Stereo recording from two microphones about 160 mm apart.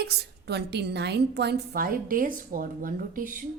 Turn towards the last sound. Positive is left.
turn(degrees=-60)  # may be behind; listen again after turning